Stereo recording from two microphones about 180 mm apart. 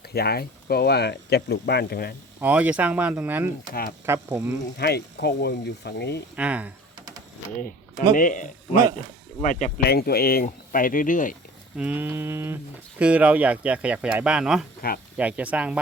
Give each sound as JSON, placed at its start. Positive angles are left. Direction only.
{"t": 0.1, "sound": "speech", "side_deg": 60}
{"t": 2.4, "sound": "speech", "side_deg": -10}
{"t": 4.8, "sound": "speech", "side_deg": 65}
{"t": 6.3, "sound": "speech", "side_deg": -5}
{"t": 8.1, "sound": "speech", "side_deg": 50}
{"t": 8.7, "sound": "speech", "side_deg": -15}
{"t": 9.4, "sound": "speech", "side_deg": 45}
{"t": 9.8, "sound": "speech", "side_deg": 60}
{"t": 11.8, "sound": "speech", "side_deg": -10}
{"t": 14.8, "sound": "speech", "side_deg": 55}
{"t": 15.2, "sound": "speech", "side_deg": -10}